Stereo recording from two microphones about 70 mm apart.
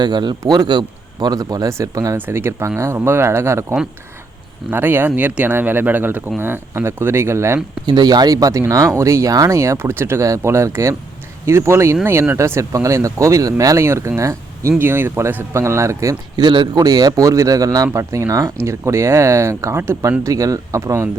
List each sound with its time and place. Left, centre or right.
0.0 s a man's voice: right
2.1 s speech: right
7.9 s speech: right
10.2 s speech: right
13.8 s speech: right
14.8 s speech: right
15.5 s speech: right
16.4 s a man's voice: right
20.0 s speech: right